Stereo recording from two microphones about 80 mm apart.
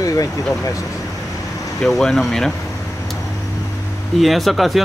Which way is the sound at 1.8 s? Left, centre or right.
Centre.